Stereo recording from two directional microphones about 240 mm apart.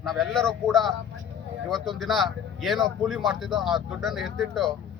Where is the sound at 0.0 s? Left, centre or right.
Centre.